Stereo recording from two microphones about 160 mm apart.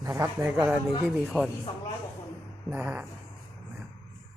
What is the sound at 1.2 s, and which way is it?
Speech, centre (ahead or behind).